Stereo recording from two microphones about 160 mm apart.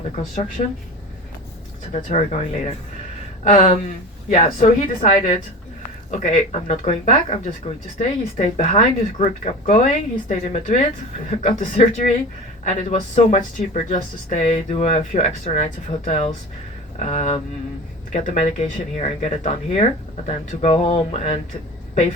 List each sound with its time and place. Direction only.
0.6 s speech: 40° left (ahead or behind)
1.9 s speech: 40° left (ahead or behind)